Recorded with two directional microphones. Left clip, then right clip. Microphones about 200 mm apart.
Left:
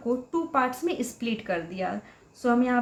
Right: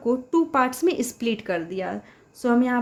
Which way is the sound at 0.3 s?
55° right (ahead or behind).